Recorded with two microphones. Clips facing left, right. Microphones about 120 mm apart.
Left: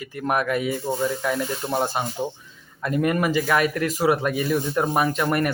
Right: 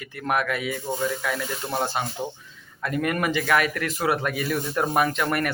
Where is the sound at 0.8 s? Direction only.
15° left (ahead or behind).